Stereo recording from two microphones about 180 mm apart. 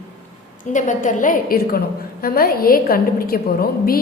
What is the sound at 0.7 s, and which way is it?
A woman's voice, 45° left (ahead or behind).